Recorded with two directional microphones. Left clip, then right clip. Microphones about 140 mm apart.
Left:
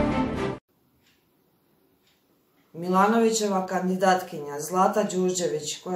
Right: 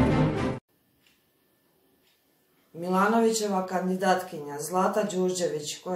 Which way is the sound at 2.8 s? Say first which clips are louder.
Left 3 dB; 20° left (ahead or behind).